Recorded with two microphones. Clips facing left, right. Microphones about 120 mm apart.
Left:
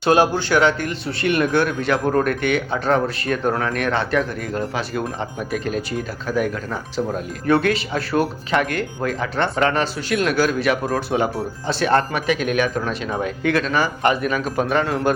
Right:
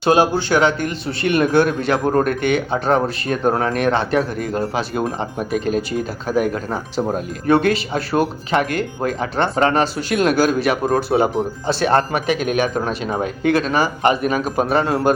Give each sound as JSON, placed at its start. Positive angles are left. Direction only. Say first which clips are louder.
{"t": 0.0, "sound": "speech", "louder": "right 1 dB", "side_deg": -20}